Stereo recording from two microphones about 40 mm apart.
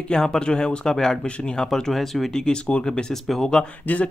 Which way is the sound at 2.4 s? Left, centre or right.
Left.